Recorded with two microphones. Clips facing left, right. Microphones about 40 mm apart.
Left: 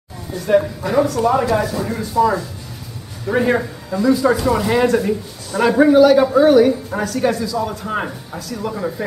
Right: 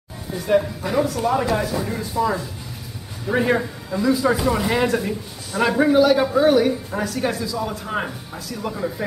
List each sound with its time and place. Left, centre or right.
0.5 s a man's voice: centre
8.7 s a man's voice: centre